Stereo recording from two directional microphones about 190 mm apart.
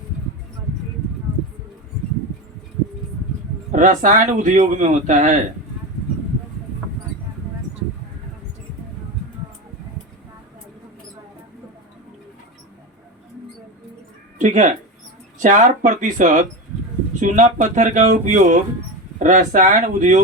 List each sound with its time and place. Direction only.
3.7 s speech: 40° right (ahead or behind)
14.3 s speech: 40° right (ahead or behind)